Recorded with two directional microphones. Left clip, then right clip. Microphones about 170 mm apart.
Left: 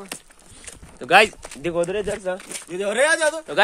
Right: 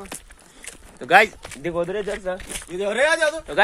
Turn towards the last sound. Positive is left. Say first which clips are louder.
# even
turn(degrees=35)  # may be behind; listen again after turning